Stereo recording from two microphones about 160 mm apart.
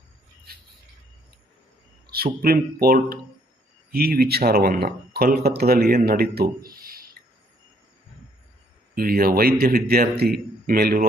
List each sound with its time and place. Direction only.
2.0 s a man's voice: 70° right (ahead or behind)
9.0 s a man's voice: 65° right (ahead or behind)